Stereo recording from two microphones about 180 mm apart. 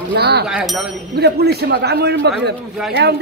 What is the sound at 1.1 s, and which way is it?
A man's voice, 65° right (ahead or behind).